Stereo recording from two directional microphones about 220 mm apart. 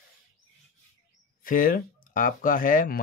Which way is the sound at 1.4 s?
40° left (ahead or behind).